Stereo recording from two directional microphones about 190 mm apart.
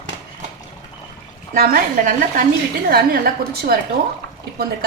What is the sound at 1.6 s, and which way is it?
A woman's voice, 45° right (ahead or behind).